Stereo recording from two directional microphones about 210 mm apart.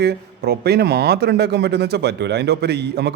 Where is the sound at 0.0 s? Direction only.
50° right (ahead or behind).